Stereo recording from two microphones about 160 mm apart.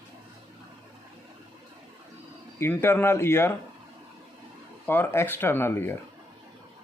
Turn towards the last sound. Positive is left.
turn(degrees=15)  # may be behind; listen again after turning